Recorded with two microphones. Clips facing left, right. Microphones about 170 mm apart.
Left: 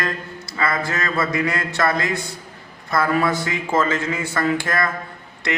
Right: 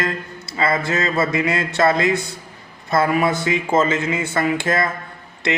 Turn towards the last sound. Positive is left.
turn(degrees=-25)  # may be behind; listen again after turning